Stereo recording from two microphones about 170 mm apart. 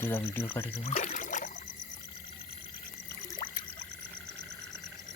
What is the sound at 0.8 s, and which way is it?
Trickle, 45° left (ahead or behind).